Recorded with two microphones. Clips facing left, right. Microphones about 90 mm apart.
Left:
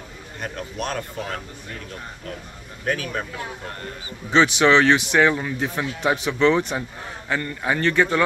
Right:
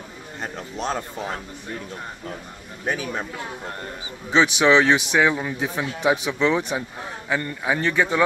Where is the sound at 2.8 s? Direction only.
20° right (ahead or behind).